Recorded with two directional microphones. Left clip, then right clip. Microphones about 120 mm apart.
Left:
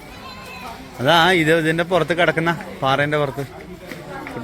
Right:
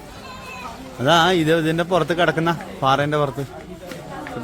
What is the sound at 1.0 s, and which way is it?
A man's voice, 20° right (ahead or behind).